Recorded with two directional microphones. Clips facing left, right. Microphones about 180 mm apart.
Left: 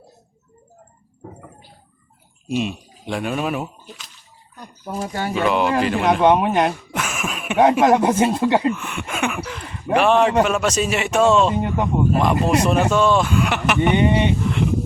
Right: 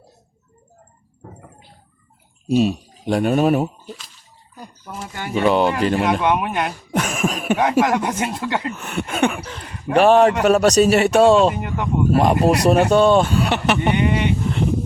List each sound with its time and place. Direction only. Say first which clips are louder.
2.5 s speech: right 6 dB; 40° right (ahead or behind)
4.9 s speech: left 6 dB; 20° left (ahead or behind)
5.3 s speech: right 3 dB; 35° right (ahead or behind)
6.1 s speech: left 4 dB; 30° left (ahead or behind)
6.9 s a sound: right 5 dB; 35° right (ahead or behind)
7.6 s speech: left 5 dB; 25° left (ahead or behind)
8.7 s speech: right 2 dB; 40° right (ahead or behind)
11.5 s speech: left 4 dB; 25° left (ahead or behind)
12.1 s speech: right 4 dB; 35° right (ahead or behind)
13.9 s speech: left 2 dB; 25° left (ahead or behind)